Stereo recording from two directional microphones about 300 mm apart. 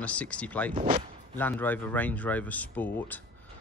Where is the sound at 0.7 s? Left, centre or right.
Right.